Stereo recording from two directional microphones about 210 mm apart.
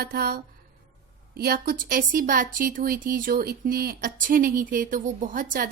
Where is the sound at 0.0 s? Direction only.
45° right (ahead or behind).